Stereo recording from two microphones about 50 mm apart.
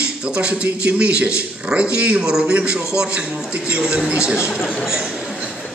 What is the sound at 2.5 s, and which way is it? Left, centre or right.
A man's voice, right.